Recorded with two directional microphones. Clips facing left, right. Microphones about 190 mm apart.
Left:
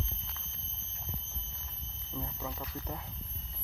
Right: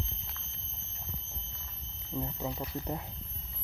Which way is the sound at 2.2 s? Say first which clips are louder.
Right 5 dB; 25° right (ahead or behind).